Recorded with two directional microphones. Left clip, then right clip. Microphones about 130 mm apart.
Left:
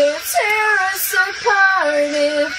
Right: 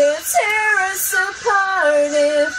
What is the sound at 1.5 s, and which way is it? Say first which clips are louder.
Music: left 1 dB; 15° left (ahead or behind).